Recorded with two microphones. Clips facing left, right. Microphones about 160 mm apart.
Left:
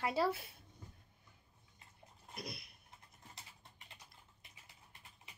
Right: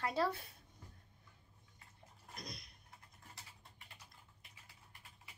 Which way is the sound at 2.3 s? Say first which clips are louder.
Left 3 dB; 5° left (ahead or behind).